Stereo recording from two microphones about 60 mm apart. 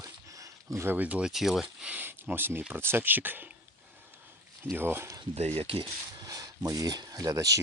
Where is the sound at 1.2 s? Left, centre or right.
Centre.